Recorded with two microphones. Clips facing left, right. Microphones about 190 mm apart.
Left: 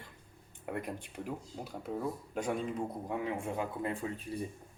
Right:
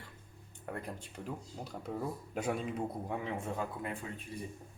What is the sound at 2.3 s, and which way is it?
A man's voice, 5° right (ahead or behind).